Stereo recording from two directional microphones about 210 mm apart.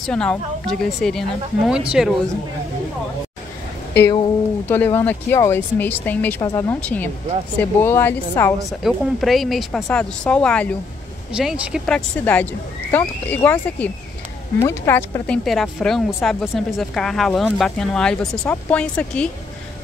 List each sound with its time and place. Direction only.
0.0 s a woman's voice: 5° left (ahead or behind)
4.0 s speech: 20° left (ahead or behind)
4.6 s speech: 10° left (ahead or behind)
8.6 s a woman's voice: centre (ahead or behind)